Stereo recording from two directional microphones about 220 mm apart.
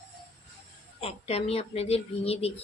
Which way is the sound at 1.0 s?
25° left (ahead or behind).